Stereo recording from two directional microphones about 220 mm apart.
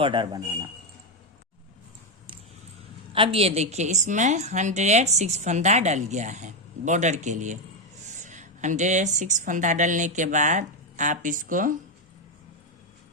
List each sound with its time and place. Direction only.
0.0 s a man's voice: 20° right (ahead or behind)
3.1 s a woman's voice: 25° right (ahead or behind)